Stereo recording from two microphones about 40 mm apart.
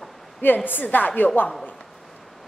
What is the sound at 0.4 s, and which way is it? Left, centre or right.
A woman's voice, left.